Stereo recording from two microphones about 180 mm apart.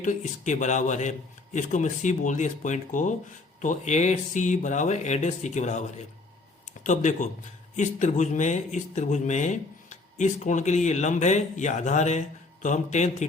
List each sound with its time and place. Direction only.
0.0 s speech: 40° left (ahead or behind)